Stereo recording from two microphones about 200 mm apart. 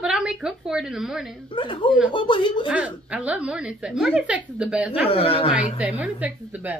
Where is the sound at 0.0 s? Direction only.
5° right (ahead or behind).